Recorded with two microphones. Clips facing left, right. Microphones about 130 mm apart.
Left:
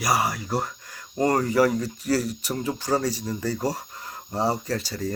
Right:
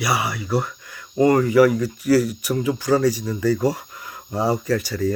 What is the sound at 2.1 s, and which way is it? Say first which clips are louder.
Speech: right 7 dB; 65° right (ahead or behind).